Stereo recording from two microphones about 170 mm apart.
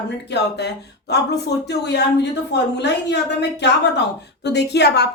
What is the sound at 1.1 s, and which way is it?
A woman's voice, 75° left (ahead or behind).